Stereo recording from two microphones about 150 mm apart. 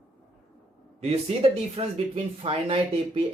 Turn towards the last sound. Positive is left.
turn(degrees=-40)  # may be behind; listen again after turning